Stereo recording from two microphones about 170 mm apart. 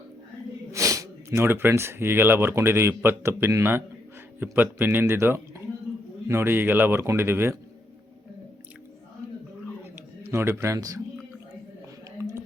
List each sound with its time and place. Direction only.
0.7 s a man's voice: 20° right (ahead or behind)
10.3 s a man's voice: 15° right (ahead or behind)